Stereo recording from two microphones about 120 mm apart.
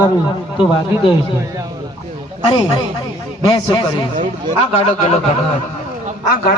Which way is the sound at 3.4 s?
40° left (ahead or behind).